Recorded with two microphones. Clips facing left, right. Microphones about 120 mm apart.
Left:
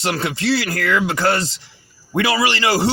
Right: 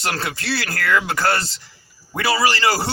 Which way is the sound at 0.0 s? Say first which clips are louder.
Left 5 dB; 20° left (ahead or behind).